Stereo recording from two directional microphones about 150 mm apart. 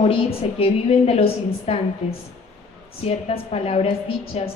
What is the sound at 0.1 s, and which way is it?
A woman's voice, 40° left (ahead or behind).